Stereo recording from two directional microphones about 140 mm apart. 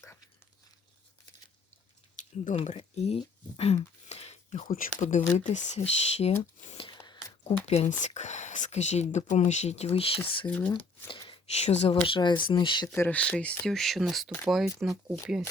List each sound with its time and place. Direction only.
2.6 s speech: 50° left (ahead or behind)
6.7 s a sound: 40° left (ahead or behind)
7.4 s speech: 50° left (ahead or behind)
10.4 s speech: 10° left (ahead or behind)
10.7 s a sound: 35° left (ahead or behind)
11.6 s speech: 50° left (ahead or behind)
12.0 s speech: 35° left (ahead or behind)
13.0 s speech: 10° left (ahead or behind)